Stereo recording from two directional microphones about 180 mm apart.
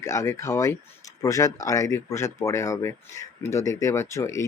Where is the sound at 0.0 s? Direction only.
15° left (ahead or behind).